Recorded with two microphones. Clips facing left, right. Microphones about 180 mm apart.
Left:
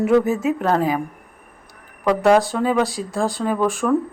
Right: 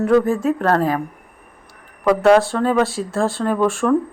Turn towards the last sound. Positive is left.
turn(degrees=0)  # may be behind; listen again after turning